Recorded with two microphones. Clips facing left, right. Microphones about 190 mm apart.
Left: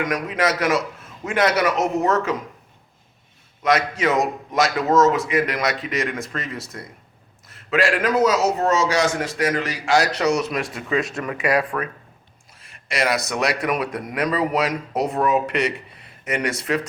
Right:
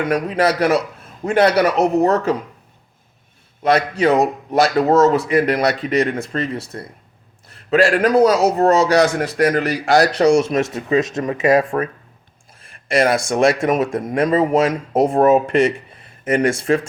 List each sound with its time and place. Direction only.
0.0 s speech: 35° right (ahead or behind)
3.6 s speech: 30° right (ahead or behind)
7.7 s speech: 35° right (ahead or behind)
8.6 s a man's voice: 60° right (ahead or behind)
10.0 s speech: 35° right (ahead or behind)
10.8 s speech: 20° right (ahead or behind)
12.5 s a sound: 50° right (ahead or behind)
13.3 s speech: 50° right (ahead or behind)